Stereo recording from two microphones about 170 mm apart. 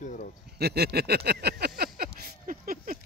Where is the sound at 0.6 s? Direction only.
70° right (ahead or behind); by 3.0 s 55° right (ahead or behind).